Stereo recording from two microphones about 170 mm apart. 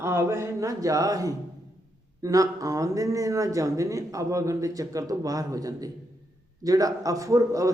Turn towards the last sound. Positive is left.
turn(degrees=-20)  # may be behind; listen again after turning